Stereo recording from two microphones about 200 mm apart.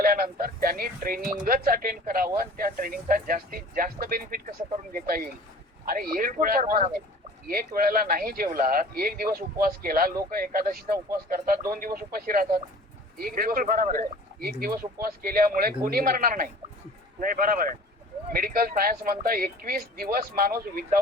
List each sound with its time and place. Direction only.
0.0 s speech: 45° right (ahead or behind)